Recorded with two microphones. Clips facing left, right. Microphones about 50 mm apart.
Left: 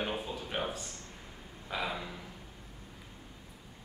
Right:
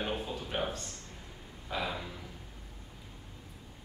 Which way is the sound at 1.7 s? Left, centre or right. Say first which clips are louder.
Even; centre.